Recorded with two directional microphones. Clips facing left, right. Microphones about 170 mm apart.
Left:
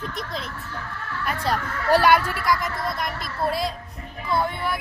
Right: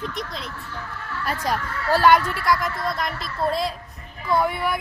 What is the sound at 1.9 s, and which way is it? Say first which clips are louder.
A woman's voice: right 1 dB; 15° left (ahead or behind).